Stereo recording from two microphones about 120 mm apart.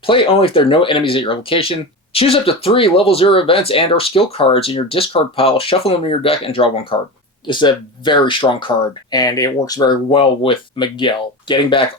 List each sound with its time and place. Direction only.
0.0 s speech: 50° left (ahead or behind)
9.1 s speech: 30° left (ahead or behind)
10.1 s speech: 50° left (ahead or behind)